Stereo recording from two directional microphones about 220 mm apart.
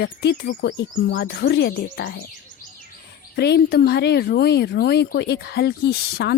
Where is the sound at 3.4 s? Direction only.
50° left (ahead or behind).